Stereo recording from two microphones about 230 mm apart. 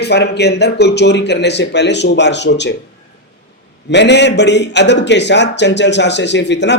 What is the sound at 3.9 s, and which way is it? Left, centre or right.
Speech, left.